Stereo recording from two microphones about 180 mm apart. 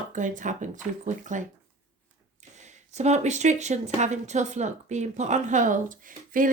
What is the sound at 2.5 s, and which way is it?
Speech, 40° right (ahead or behind).